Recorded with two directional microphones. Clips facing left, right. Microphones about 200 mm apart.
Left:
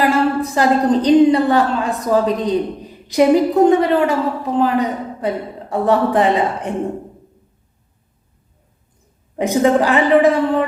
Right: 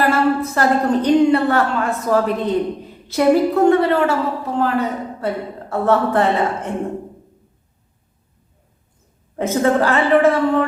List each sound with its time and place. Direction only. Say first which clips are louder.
0.0 s a woman's voice: left 1 dB; 15° left (ahead or behind)
9.3 s a woman's voice: left 2 dB; 15° left (ahead or behind)